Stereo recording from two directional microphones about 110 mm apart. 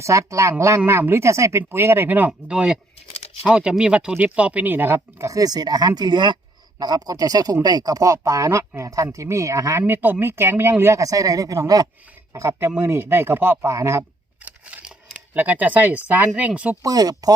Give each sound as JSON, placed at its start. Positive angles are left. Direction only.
{"t": 0.0, "sound": "speech", "side_deg": -30}
{"t": 3.1, "sound": "crumpling", "side_deg": 65}
{"t": 3.4, "sound": "speech", "side_deg": -10}
{"t": 4.9, "sound": "speech", "side_deg": -30}
{"t": 14.4, "sound": "a sound", "side_deg": -10}
{"t": 15.4, "sound": "speech", "side_deg": -15}
{"t": 16.8, "sound": "speech", "side_deg": -35}